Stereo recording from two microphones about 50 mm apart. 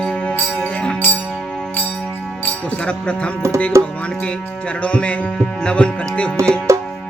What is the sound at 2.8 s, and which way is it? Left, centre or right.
Music, left.